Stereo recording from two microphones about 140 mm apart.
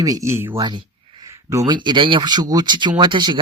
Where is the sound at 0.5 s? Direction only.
35° right (ahead or behind).